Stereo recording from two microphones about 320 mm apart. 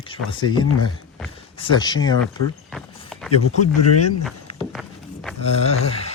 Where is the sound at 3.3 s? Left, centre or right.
Left.